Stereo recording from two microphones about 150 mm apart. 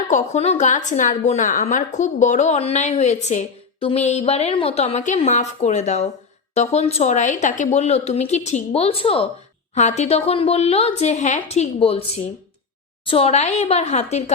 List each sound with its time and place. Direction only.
0.1 s a woman's voice: 45° left (ahead or behind)
9.7 s a woman's voice: 50° left (ahead or behind)